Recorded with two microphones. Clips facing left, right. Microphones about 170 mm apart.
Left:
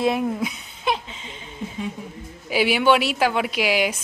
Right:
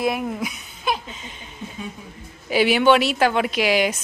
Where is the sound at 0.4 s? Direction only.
25° left (ahead or behind).